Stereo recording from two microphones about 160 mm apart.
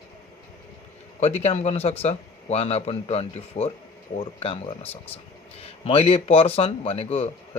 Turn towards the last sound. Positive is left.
turn(degrees=40)  # may be behind; listen again after turning